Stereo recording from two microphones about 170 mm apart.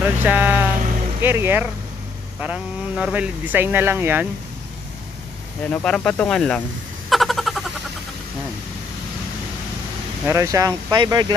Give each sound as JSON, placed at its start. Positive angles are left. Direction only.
{"t": 0.0, "sound": "speech", "side_deg": -10}
{"t": 5.6, "sound": "speech", "side_deg": 10}
{"t": 7.1, "sound": "a sound", "side_deg": 0}
{"t": 10.2, "sound": "speech", "side_deg": -20}